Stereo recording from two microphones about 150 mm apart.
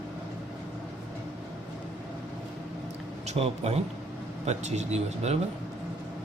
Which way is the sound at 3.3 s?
45° right (ahead or behind).